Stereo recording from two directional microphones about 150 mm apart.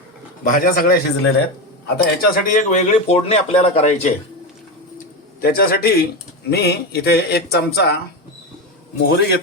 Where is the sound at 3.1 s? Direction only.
45° left (ahead or behind).